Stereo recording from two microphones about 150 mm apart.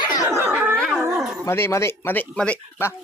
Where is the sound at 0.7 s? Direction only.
5° left (ahead or behind).